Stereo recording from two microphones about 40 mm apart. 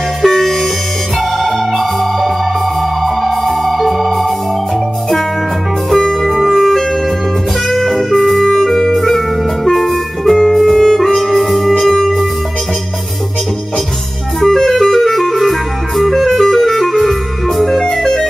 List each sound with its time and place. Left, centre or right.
0.2 s music: centre
5.9 s music: centre
6.3 s music: centre
11.1 s music: centre
14.4 s clarinet: centre
17.9 s music: centre